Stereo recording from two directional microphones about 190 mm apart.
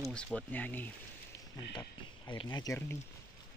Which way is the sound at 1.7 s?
25° left (ahead or behind).